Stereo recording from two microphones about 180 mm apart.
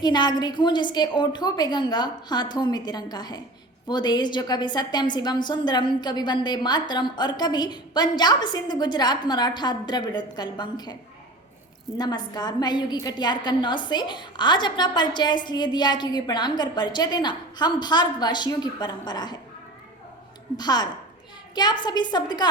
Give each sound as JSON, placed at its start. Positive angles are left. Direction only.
{"t": 0.0, "sound": "a woman's voice", "side_deg": 25}
{"t": 11.9, "sound": "a woman's voice", "side_deg": 25}
{"t": 20.6, "sound": "a woman's voice", "side_deg": 25}